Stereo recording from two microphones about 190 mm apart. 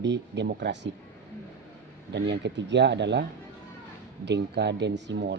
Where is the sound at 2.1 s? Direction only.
65° right (ahead or behind).